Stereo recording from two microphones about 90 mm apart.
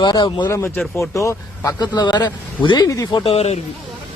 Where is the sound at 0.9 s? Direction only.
35° left (ahead or behind).